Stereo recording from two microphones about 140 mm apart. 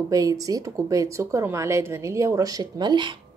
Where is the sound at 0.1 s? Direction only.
25° right (ahead or behind).